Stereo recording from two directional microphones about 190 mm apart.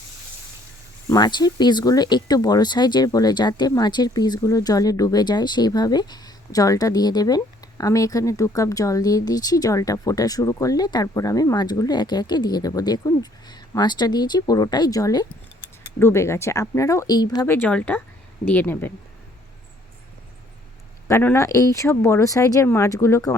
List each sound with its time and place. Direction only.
1.1 s speech: 20° left (ahead or behind)
21.1 s speech: 15° left (ahead or behind)